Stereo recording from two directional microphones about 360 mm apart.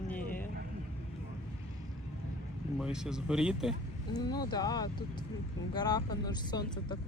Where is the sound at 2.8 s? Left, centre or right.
Centre.